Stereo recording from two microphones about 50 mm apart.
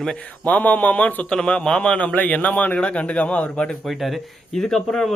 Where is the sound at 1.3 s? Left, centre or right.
Centre.